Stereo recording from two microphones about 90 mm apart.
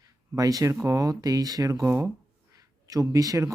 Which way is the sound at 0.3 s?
45° right (ahead or behind).